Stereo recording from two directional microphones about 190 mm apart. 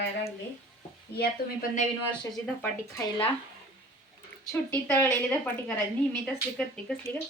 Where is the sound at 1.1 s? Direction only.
50° left (ahead or behind).